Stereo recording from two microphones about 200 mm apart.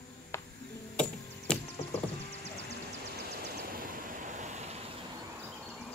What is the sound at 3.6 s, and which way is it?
Vehicle, 45° right (ahead or behind).